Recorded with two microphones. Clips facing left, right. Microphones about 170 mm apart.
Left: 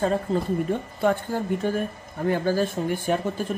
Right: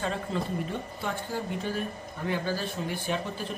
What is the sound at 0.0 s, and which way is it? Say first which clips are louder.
Speech: left 7 dB; 40° left (ahead or behind).